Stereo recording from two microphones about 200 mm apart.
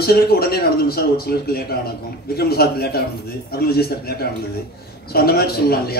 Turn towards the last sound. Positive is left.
turn(degrees=50)  # may be behind; listen again after turning